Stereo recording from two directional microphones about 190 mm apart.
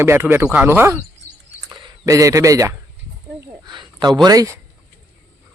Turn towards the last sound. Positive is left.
turn(degrees=-20)  # may be behind; listen again after turning